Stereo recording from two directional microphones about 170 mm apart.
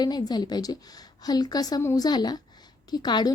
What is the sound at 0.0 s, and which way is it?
Speech, 25° left (ahead or behind).